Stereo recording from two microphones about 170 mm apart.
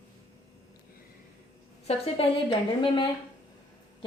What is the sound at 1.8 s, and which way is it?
Speech, 35° left (ahead or behind).